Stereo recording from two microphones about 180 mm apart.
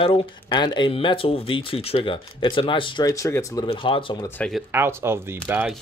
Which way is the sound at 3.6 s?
30° left (ahead or behind).